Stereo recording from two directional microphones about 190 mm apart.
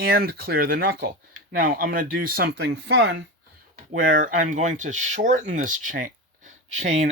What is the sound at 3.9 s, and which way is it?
Speech, 45° right (ahead or behind).